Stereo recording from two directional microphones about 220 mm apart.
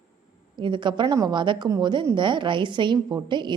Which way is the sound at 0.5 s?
20° right (ahead or behind).